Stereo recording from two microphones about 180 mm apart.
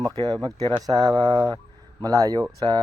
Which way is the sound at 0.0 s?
20° right (ahead or behind).